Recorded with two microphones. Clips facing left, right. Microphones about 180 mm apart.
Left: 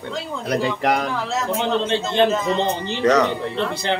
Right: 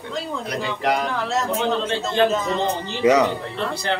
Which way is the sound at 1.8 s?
25° left (ahead or behind).